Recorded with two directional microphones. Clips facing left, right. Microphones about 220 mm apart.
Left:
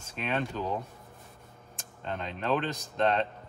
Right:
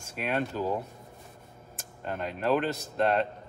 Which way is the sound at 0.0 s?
10° right (ahead or behind).